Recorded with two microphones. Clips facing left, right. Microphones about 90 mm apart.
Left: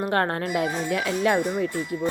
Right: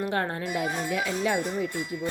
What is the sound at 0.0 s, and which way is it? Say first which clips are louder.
Speech: left 4 dB; 60° left (ahead or behind).